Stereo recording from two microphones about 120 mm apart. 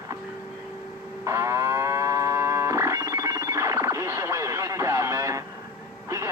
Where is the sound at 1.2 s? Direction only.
25° right (ahead or behind).